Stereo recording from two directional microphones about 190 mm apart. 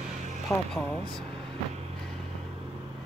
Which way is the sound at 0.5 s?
15° left (ahead or behind).